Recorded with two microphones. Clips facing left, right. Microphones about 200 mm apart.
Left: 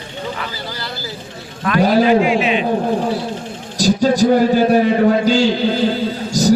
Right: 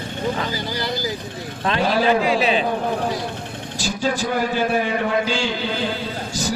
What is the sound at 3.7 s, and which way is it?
A man's voice, 40° left (ahead or behind).